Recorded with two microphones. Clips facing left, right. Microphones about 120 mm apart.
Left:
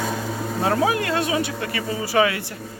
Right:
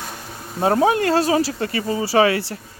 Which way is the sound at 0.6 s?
30° right (ahead or behind).